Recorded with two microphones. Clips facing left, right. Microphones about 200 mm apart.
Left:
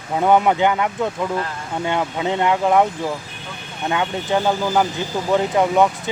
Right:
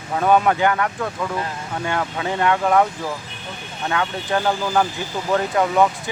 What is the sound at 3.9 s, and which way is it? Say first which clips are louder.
Speech: left 2 dB; 15° left (ahead or behind).